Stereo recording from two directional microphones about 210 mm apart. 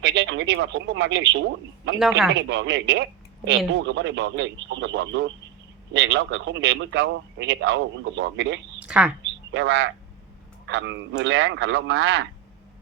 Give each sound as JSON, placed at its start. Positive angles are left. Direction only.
{"t": 0.0, "sound": "a man's voice", "side_deg": -60}
{"t": 2.0, "sound": "speech", "side_deg": 0}
{"t": 2.3, "sound": "a man's voice", "side_deg": -60}
{"t": 8.8, "sound": "a woman's voice", "side_deg": -5}
{"t": 9.5, "sound": "a man's voice", "side_deg": -60}